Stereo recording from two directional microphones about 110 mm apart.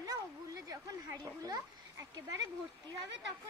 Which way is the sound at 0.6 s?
35° right (ahead or behind).